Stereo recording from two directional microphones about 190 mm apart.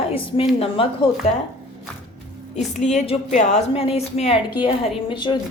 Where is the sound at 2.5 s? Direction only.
35° left (ahead or behind).